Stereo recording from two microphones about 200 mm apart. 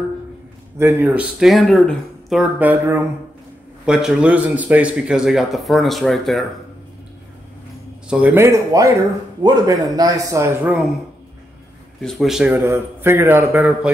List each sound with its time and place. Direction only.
0.7 s a man's voice: 10° right (ahead or behind)
8.1 s a man's voice: 10° right (ahead or behind)
12.0 s a man's voice: centre (ahead or behind)